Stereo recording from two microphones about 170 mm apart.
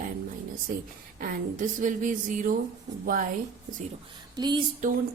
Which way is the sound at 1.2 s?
50° right (ahead or behind).